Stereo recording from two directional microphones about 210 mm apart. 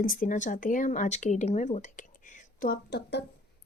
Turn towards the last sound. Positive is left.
turn(degrees=55)  # may be behind; listen again after turning